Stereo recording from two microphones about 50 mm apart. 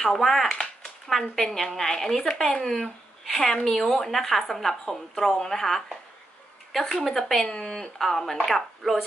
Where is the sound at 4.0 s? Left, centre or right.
Centre.